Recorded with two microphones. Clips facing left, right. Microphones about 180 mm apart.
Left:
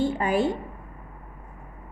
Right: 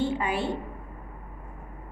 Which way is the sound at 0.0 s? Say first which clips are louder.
Left 4 dB; 45° left (ahead or behind).